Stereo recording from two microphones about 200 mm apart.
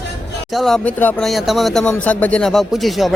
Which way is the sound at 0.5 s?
Centre (ahead or behind).